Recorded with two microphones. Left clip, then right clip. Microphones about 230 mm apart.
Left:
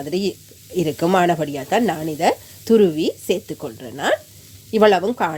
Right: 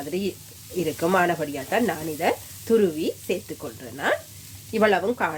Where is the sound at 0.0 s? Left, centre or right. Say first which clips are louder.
Left 6 dB; left.